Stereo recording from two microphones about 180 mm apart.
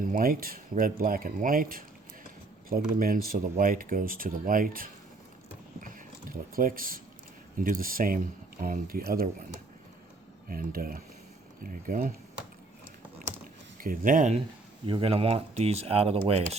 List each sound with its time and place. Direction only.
0.0 s speech: 50° right (ahead or behind)
10.5 s speech: 55° right (ahead or behind)
13.7 s speech: 50° right (ahead or behind)
14.8 s speech: 30° right (ahead or behind)